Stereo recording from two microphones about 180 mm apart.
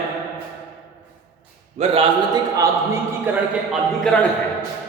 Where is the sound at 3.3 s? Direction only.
10° right (ahead or behind).